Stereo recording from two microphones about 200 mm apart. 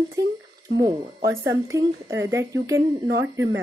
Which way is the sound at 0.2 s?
15° right (ahead or behind).